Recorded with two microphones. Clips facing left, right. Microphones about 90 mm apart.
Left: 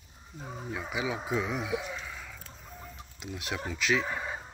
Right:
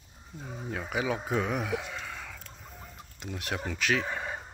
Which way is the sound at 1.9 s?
80° right.